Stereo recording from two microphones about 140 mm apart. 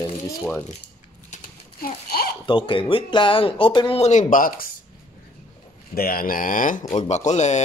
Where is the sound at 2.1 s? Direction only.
90° left.